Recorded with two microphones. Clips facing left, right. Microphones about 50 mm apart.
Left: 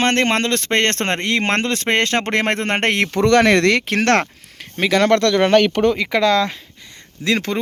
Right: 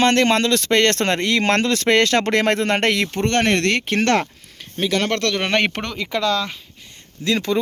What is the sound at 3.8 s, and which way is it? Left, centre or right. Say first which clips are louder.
Speech: left 2 dB; left.